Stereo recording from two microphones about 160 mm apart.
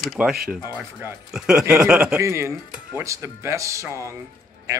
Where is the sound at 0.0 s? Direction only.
5° right (ahead or behind).